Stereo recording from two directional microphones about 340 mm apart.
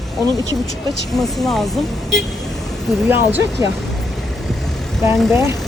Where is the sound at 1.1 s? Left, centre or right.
Centre.